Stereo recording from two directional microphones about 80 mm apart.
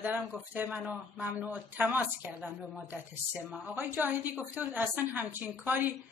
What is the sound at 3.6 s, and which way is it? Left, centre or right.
A woman's voice, right.